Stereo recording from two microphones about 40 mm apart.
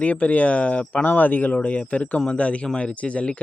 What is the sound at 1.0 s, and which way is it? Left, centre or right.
Speech, left.